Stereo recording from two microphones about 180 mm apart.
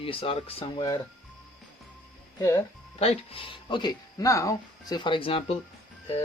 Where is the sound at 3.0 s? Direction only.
30° left (ahead or behind).